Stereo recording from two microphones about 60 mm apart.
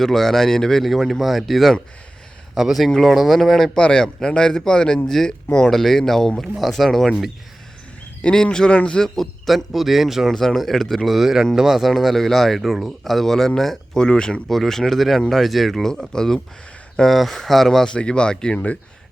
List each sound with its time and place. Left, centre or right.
0.0 s speech: centre
3.8 s speech: centre
8.2 s speech: centre
9.0 s speech: centre
17.9 s speech: centre